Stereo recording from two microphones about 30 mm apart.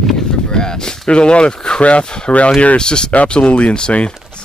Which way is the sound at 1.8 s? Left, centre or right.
Left.